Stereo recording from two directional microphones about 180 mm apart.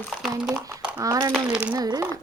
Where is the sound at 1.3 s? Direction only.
5° right (ahead or behind).